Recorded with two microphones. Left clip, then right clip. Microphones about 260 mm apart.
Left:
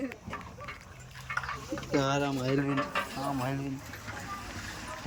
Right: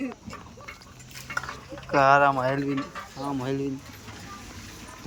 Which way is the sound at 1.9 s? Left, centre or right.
Centre.